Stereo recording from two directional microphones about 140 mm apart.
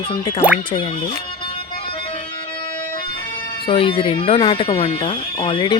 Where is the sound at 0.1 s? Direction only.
40° left (ahead or behind).